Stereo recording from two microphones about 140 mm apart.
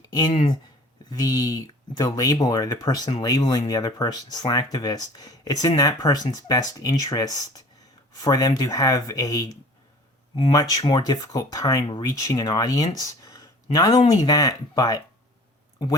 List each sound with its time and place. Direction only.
1.1 s speech: 30° left (ahead or behind)